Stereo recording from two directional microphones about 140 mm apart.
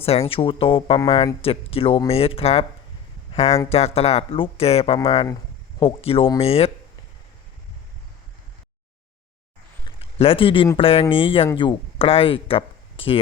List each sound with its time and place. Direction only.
0.0 s speech: 45° left (ahead or behind)
10.0 s speech: 45° left (ahead or behind)